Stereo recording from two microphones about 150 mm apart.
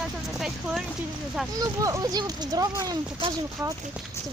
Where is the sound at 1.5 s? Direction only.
25° right (ahead or behind).